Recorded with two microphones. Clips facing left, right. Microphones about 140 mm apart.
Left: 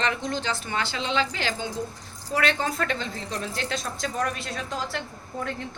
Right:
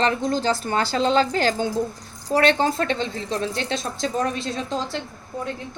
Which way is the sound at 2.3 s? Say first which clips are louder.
Right 6 dB; 30° right (ahead or behind).